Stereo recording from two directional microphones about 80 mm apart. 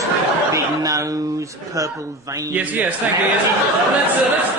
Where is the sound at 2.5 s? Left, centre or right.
Right.